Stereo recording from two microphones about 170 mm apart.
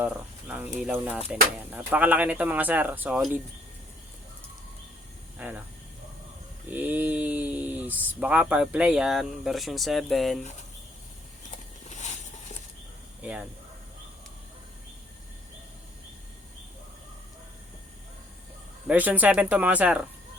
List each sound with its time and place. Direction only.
0.0 s speech: 10° right (ahead or behind)
5.4 s speech: 10° right (ahead or behind)
6.7 s speech: 10° right (ahead or behind)
11.9 s a sound: 45° left (ahead or behind)
13.2 s speech: 5° right (ahead or behind)
18.9 s speech: 10° right (ahead or behind)